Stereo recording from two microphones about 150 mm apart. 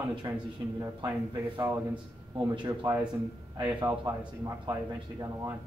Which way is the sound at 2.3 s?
10° right (ahead or behind).